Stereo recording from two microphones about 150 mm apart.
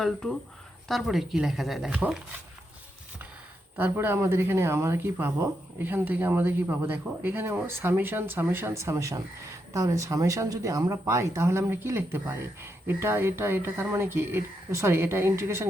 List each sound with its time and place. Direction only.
0.0 s speech: centre (ahead or behind)
3.8 s speech: 15° right (ahead or behind)